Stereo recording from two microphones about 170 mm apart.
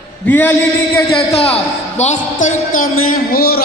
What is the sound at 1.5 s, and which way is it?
A man's voice, 40° left (ahead or behind).